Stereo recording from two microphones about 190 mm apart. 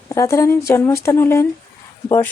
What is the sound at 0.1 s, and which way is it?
Speech, 15° left (ahead or behind).